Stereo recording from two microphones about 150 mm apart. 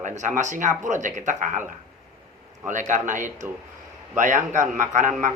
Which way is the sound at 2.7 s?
60° right (ahead or behind).